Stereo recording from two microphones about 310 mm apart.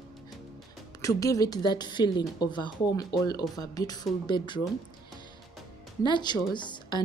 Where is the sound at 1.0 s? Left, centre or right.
Centre.